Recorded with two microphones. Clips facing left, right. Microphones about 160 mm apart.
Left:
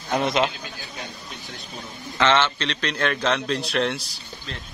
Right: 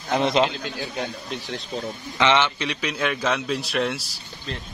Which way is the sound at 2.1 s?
15° right (ahead or behind).